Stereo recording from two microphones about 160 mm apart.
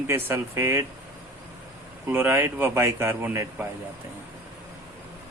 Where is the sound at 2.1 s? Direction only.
15° right (ahead or behind).